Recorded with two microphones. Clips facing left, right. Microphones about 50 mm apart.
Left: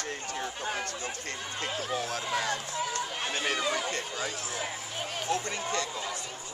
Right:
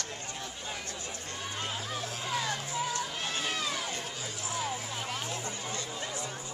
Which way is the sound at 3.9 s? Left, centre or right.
Left.